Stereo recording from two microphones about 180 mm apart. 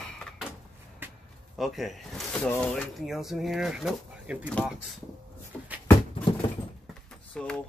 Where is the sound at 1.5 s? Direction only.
Centre (ahead or behind).